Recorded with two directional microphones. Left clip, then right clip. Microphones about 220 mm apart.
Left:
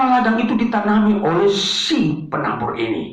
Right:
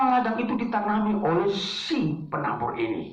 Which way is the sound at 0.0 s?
50° left (ahead or behind).